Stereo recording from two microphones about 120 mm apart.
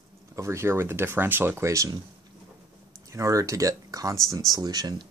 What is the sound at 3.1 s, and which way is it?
Speech, 25° right (ahead or behind).